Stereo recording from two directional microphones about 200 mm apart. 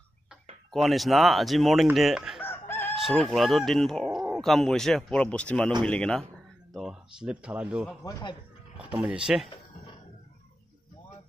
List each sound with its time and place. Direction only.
0.7 s speech: centre (ahead or behind)
2.4 s chicken: 10° left (ahead or behind)
3.0 s speech: centre (ahead or behind)
8.0 s speech: 20° left (ahead or behind)
8.7 s speech: 5° right (ahead or behind)